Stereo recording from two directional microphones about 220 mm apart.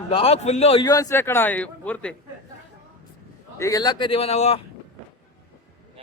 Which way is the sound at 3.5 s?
15° left (ahead or behind).